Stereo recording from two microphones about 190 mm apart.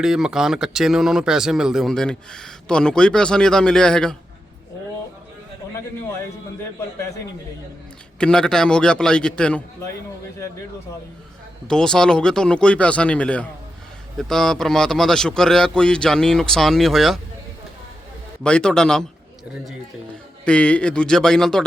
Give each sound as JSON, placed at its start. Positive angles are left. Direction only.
{"t": 0.0, "sound": "speech", "side_deg": -5}
{"t": 8.2, "sound": "speech", "side_deg": 5}
{"t": 11.7, "sound": "speech", "side_deg": 5}
{"t": 18.4, "sound": "speech", "side_deg": 5}
{"t": 20.4, "sound": "speech", "side_deg": 5}